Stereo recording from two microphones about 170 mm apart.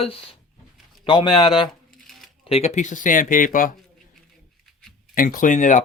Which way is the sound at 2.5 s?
40° left (ahead or behind).